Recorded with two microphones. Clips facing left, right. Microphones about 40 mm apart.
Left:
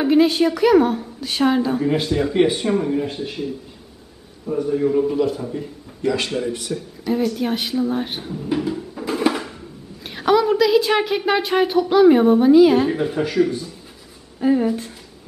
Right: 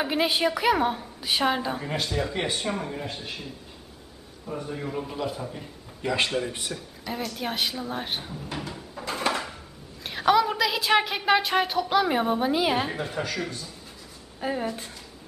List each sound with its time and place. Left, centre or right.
0.0 s a woman's voice: centre
1.9 s speech: centre
6.0 s speech: centre
6.7 s speech: centre
12.9 s speech: centre